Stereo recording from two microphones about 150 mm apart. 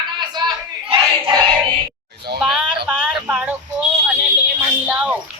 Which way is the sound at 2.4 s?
5° right (ahead or behind).